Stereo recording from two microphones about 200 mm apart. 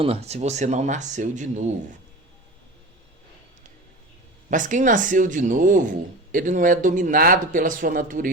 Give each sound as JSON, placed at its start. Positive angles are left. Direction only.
{"t": 0.0, "sound": "speech", "side_deg": -30}
{"t": 4.4, "sound": "speech", "side_deg": -40}